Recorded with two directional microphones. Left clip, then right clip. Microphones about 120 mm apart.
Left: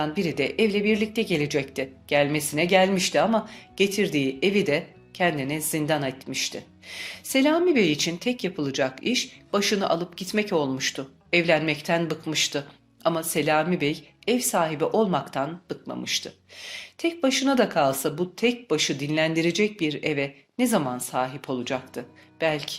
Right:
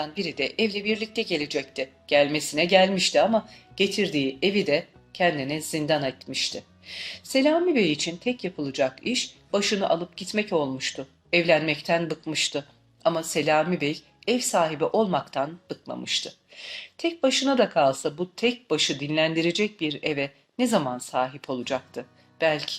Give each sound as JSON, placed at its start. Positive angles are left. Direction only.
{"t": 0.0, "sound": "speech", "side_deg": 50}